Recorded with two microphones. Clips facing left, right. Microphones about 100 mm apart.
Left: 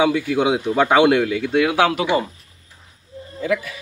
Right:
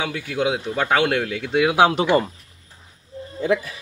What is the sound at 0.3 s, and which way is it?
Speech, 15° left (ahead or behind).